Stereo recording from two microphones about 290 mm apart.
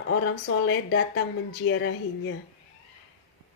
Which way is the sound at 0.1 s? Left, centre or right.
Left.